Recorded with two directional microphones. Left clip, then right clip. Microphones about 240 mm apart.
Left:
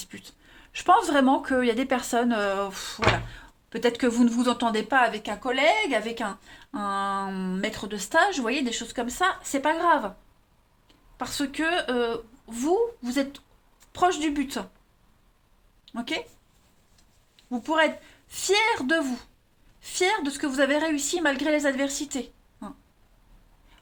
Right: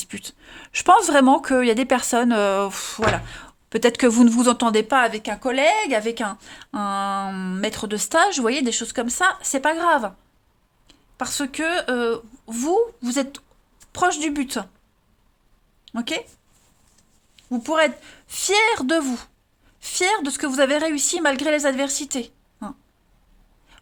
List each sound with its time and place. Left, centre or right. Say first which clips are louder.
0.0 s speech: right 8 dB; right
15.8 s speech: right 4 dB; right
17.3 s speech: right 4 dB; right